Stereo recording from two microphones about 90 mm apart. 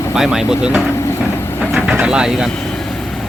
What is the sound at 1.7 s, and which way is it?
Vehicle, 5° right (ahead or behind).